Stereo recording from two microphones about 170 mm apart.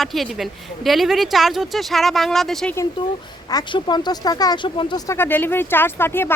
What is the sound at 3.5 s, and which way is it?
Speech, 25° left (ahead or behind).